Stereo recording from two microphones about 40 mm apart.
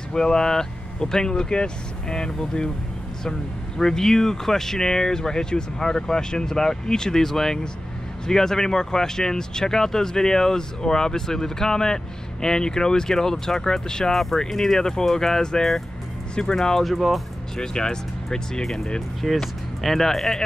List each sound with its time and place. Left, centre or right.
0.1 s speech: centre
14.1 s speech: centre
16.8 s speech: centre
17.6 s speech: centre